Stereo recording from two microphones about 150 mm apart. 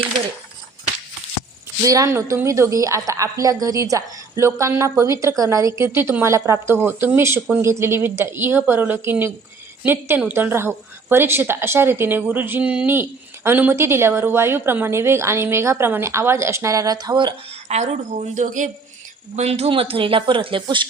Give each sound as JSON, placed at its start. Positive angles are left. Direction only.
{"t": 1.8, "sound": "a woman's voice", "side_deg": -20}
{"t": 17.5, "sound": "speech", "side_deg": -45}
{"t": 19.4, "sound": "speech", "side_deg": -45}